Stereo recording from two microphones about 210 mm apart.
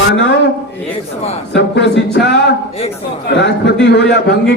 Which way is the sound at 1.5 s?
55° left (ahead or behind).